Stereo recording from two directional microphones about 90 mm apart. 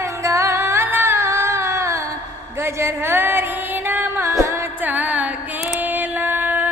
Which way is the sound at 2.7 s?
25° right (ahead or behind).